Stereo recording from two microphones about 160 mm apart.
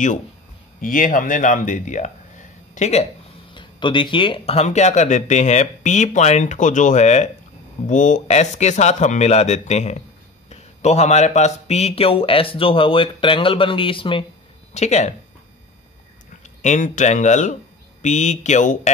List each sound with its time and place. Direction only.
0.7 s speech: 60° left (ahead or behind)
3.5 s speech: 30° left (ahead or behind)
14.7 s speech: 45° left (ahead or behind)
16.6 s speech: 50° left (ahead or behind)